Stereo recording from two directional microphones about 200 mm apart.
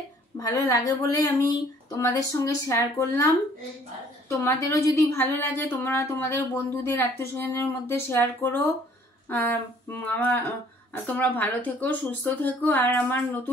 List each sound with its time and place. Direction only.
0.4 s a woman's voice: 20° left (ahead or behind)
4.3 s speech: 15° left (ahead or behind)